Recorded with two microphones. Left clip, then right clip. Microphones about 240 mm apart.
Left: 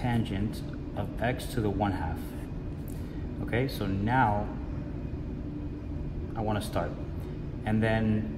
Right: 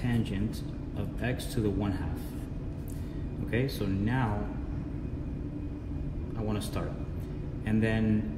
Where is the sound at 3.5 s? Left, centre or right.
Left.